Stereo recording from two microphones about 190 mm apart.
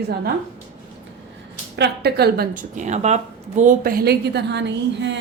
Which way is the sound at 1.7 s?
60° right (ahead or behind).